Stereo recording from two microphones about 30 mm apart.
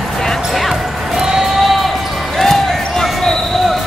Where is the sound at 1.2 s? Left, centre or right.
Centre.